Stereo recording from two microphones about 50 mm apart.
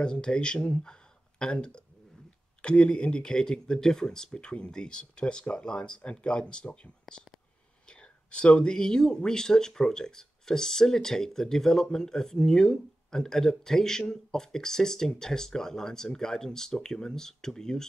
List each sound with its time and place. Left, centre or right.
0.0 s speech: centre